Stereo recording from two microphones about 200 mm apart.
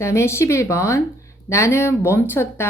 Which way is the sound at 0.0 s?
15° left (ahead or behind).